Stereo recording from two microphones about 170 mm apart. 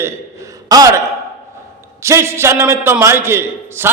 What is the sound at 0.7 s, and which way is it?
A man's voice, 20° right (ahead or behind).